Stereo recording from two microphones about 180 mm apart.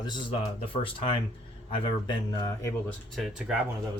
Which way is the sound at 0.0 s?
25° left (ahead or behind).